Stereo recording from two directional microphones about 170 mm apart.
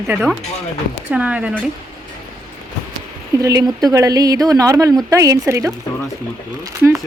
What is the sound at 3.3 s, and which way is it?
A woman's voice, 20° right (ahead or behind).